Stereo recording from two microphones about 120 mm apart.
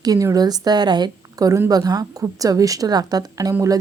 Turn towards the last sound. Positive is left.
turn(degrees=-30)  # may be behind; listen again after turning